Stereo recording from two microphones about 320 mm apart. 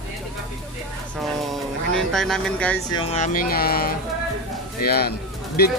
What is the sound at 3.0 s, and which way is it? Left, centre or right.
Speech, left.